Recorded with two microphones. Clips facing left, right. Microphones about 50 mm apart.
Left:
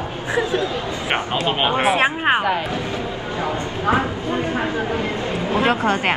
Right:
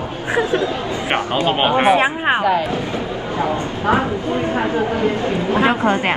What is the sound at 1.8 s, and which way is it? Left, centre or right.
Speech, centre.